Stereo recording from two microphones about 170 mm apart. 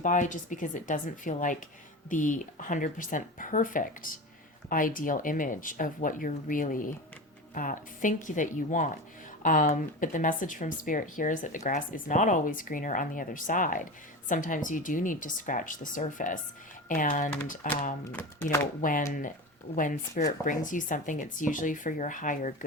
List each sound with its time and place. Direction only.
0.0 s speech: 45° left (ahead or behind)